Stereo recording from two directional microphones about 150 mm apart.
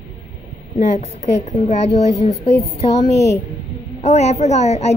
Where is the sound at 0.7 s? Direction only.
50° left (ahead or behind).